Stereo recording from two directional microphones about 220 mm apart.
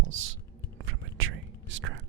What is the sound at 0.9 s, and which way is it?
Whispering, 60° right (ahead or behind).